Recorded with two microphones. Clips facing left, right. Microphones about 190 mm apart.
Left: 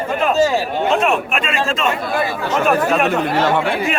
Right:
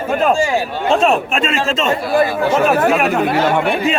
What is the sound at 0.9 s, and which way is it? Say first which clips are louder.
Speech: right 4 dB; 30° right (ahead or behind).